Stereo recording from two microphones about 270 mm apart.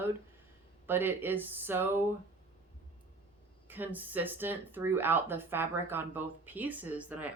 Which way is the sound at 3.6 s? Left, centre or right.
Centre.